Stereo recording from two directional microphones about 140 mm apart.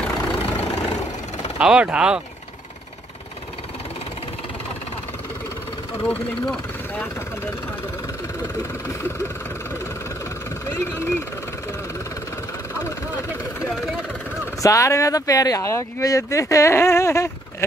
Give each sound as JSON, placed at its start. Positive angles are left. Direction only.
{"t": 1.6, "sound": "speech", "side_deg": -5}
{"t": 6.0, "sound": "speech", "side_deg": 10}
{"t": 8.8, "sound": "speech", "side_deg": 20}
{"t": 10.7, "sound": "speech", "side_deg": 15}
{"t": 14.4, "sound": "speech", "side_deg": 20}